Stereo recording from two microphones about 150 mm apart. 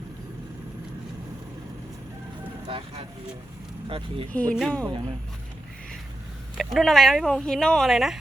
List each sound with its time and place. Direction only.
2.6 s speech: 40° right (ahead or behind)
4.3 s speech: 10° left (ahead or behind)
6.6 s speech: centre (ahead or behind)